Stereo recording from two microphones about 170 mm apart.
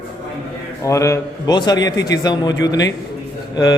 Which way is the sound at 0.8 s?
15° left (ahead or behind).